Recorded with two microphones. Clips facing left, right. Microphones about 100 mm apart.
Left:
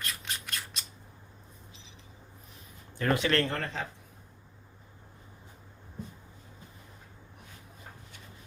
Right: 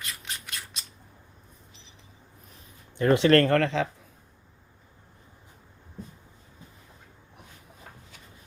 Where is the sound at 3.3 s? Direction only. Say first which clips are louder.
Right 10 dB; 55° right (ahead or behind); by 3.9 s 90° right.